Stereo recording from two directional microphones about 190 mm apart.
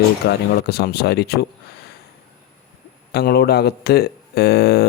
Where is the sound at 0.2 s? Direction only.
60° left (ahead or behind).